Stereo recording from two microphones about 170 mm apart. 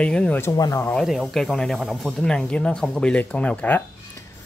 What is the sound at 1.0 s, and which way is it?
Speech, centre (ahead or behind).